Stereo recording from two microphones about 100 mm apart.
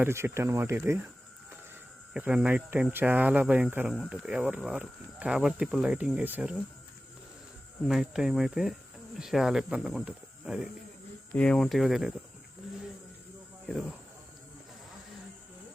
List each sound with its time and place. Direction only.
0.0 s speech: 25° right (ahead or behind)
2.1 s speech: 10° right (ahead or behind)
7.9 s speech: 5° right (ahead or behind)
11.3 s speech: 10° left (ahead or behind)